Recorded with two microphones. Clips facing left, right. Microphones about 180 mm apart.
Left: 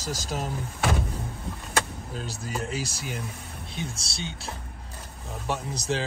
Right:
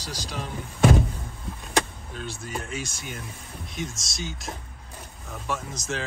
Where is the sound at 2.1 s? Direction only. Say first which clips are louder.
Left 1 dB; 35° left (ahead or behind).